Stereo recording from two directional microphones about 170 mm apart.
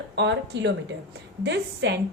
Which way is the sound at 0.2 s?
90° right.